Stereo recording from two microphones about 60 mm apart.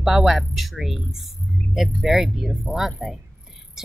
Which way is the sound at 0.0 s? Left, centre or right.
Centre.